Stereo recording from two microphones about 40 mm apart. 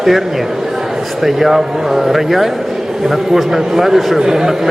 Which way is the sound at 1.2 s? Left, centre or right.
Centre.